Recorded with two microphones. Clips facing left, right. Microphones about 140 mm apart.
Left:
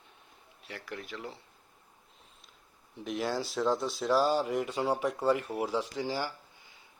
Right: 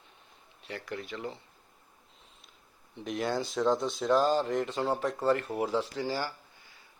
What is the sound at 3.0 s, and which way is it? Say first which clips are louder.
Speech: right 1 dB; centre (ahead or behind).